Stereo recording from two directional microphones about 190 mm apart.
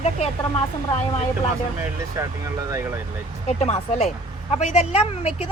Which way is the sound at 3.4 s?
35° left (ahead or behind).